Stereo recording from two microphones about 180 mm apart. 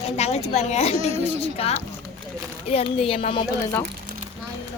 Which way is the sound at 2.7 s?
30° left (ahead or behind).